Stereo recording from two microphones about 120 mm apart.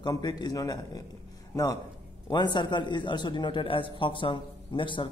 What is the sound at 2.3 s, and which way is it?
Speech, 40° left (ahead or behind).